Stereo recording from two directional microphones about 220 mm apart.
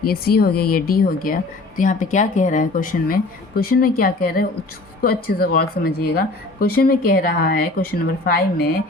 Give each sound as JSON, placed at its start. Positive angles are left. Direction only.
{"t": 0.0, "sound": "a woman's voice", "side_deg": 45}